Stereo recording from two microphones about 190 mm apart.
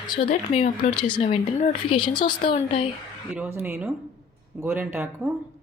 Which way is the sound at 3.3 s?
10° right (ahead or behind).